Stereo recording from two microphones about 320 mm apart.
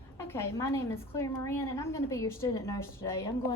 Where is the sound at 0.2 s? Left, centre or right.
Centre.